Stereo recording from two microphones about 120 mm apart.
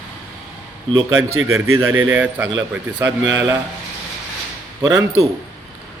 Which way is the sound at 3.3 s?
25° right (ahead or behind).